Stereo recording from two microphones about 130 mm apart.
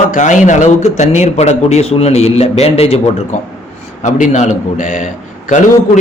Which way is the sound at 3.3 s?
65° left (ahead or behind).